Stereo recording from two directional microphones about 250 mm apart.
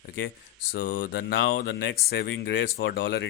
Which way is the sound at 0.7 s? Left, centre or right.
Left.